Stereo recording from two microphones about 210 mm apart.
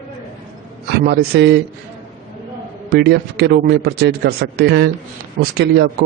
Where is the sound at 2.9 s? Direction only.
50° right (ahead or behind).